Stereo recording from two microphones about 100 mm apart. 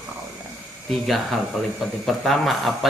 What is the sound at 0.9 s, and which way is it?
Speech, centre (ahead or behind).